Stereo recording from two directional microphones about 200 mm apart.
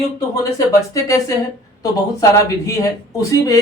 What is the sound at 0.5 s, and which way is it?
Speech, 15° left (ahead or behind).